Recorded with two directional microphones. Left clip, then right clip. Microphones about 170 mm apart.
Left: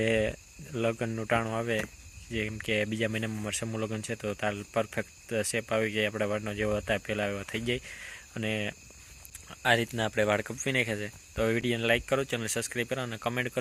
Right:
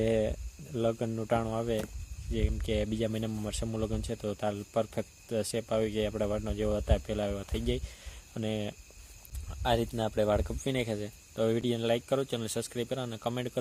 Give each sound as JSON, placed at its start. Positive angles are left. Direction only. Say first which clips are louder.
{"t": 0.0, "sound": "speech", "louder": "left 1 dB", "side_deg": 0}
{"t": 9.9, "sound": "speech", "louder": "left 2 dB", "side_deg": 35}
{"t": 10.2, "sound": "speech", "louder": "left 1 dB", "side_deg": 5}